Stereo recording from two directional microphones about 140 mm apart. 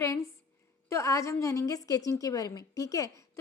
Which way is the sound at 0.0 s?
20° left (ahead or behind).